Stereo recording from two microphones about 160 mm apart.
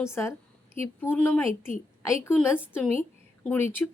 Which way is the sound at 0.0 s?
15° left (ahead or behind).